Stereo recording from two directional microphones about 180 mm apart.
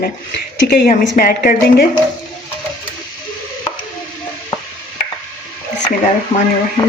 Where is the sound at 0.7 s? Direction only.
45° left (ahead or behind).